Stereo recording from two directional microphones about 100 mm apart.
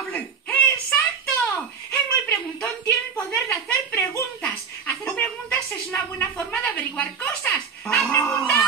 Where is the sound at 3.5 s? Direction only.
30° left (ahead or behind).